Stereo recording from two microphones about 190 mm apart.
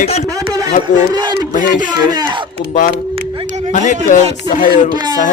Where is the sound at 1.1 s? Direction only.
25° right (ahead or behind).